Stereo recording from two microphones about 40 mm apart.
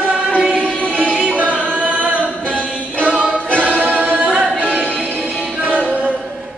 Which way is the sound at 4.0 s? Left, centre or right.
Right.